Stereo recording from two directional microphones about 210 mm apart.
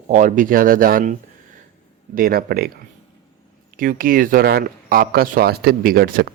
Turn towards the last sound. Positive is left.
turn(degrees=-45)  # may be behind; listen again after turning